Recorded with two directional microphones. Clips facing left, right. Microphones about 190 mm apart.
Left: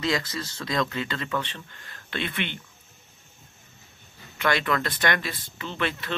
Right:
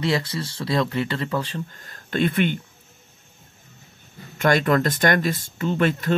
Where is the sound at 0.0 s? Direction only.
30° right (ahead or behind).